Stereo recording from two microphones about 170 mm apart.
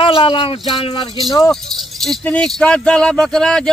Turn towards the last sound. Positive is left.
turn(degrees=5)  # may be behind; listen again after turning